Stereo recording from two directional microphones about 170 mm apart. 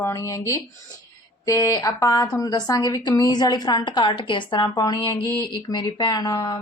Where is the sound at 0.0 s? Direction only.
20° left (ahead or behind).